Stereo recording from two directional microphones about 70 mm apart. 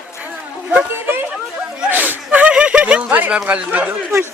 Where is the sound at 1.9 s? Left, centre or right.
Right.